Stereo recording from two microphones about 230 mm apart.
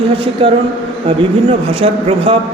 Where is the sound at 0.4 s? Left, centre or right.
Right.